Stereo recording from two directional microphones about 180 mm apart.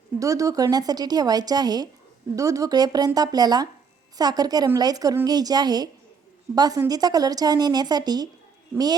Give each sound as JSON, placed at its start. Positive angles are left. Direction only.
{"t": 0.2, "sound": "speech", "side_deg": -20}